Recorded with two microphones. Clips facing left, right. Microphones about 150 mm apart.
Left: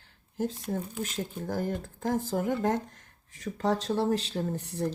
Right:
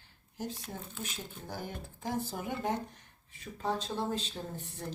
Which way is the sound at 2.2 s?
90° left.